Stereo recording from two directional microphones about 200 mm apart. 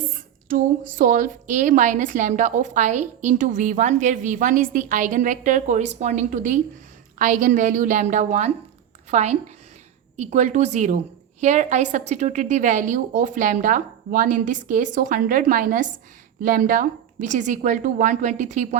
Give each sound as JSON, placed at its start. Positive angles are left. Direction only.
{"t": 0.1, "sound": "a woman's voice", "side_deg": -45}